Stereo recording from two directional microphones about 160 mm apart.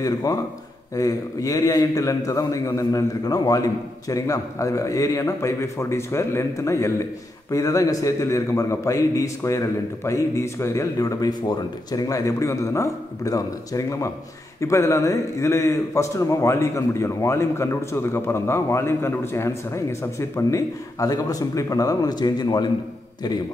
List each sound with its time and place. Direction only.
0.0 s a man's voice: 20° left (ahead or behind)